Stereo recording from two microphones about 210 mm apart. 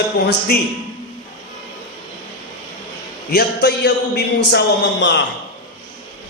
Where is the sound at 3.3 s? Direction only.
50° left (ahead or behind).